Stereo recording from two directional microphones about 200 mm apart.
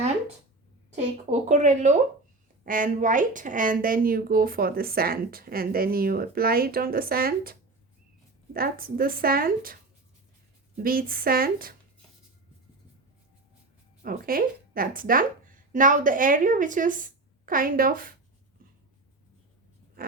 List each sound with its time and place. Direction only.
1.3 s speech: 35° right (ahead or behind)
8.5 s speech: 45° right (ahead or behind)
10.8 s speech: 45° right (ahead or behind)
14.0 s speech: 45° right (ahead or behind)
20.0 s a sound: 45° right (ahead or behind)